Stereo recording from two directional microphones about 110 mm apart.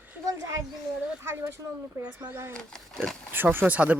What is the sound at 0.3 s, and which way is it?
A child's voice, 30° right (ahead or behind).